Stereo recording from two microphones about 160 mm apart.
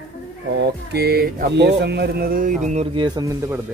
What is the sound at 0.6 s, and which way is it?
Speech, 85° right.